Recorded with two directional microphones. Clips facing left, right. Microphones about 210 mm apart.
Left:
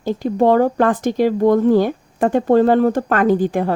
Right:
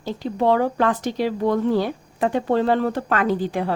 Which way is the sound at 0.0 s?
50° left (ahead or behind).